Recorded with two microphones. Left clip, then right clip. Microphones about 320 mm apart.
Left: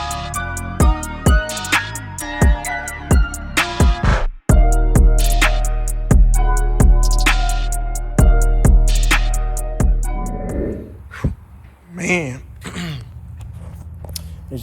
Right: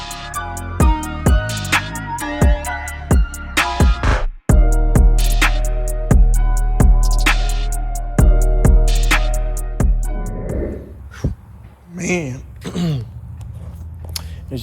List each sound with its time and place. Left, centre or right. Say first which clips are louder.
0.1 s music: left 2 dB; centre
11.1 s dog: left 1 dB; centre
11.9 s a sound: left 2 dB; centre